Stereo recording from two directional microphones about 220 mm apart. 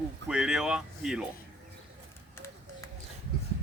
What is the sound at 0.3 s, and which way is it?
Speech, 5° right (ahead or behind).